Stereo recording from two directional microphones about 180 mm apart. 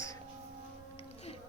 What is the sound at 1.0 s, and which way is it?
Music, 35° left (ahead or behind).